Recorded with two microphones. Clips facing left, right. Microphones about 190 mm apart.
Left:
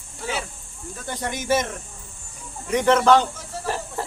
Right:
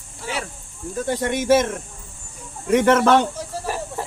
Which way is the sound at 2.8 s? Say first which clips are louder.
Even; 60° right (ahead or behind).